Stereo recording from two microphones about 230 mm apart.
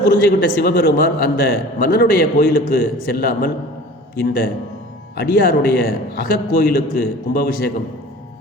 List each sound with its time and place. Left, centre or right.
0.0 s a man's voice: left